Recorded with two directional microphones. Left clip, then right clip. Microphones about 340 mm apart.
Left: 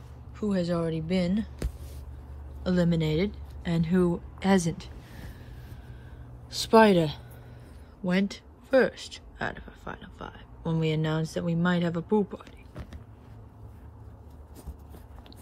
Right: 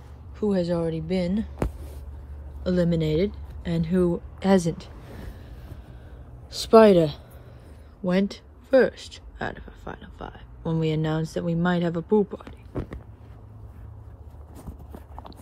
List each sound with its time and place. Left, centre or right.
0.4 s speech: centre
1.6 s a sound: centre
2.6 s speech: centre
5.2 s vehicle: right
6.5 s speech: centre
12.4 s speech: centre